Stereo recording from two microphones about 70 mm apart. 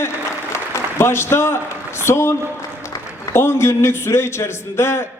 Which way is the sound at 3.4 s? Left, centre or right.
Left.